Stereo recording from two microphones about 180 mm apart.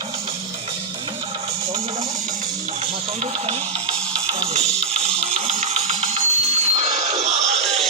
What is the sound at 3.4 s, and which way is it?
Music, 35° right (ahead or behind).